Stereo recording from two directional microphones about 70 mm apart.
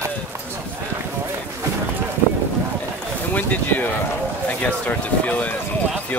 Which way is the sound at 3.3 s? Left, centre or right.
Left.